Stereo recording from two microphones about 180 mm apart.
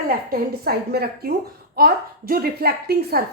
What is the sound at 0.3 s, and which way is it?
A woman's voice, 60° right (ahead or behind).